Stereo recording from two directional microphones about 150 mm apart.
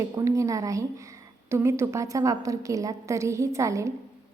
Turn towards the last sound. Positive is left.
turn(degrees=-20)  # may be behind; listen again after turning